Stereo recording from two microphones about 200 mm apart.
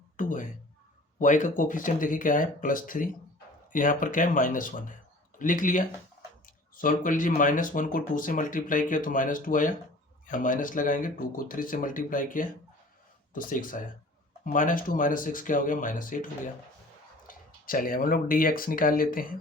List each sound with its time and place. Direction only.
0.2 s speech: 40° left (ahead or behind)